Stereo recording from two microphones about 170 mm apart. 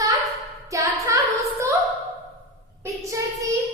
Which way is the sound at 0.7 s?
20° right (ahead or behind).